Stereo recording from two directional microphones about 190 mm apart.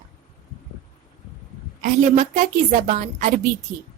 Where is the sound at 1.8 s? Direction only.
40° right (ahead or behind).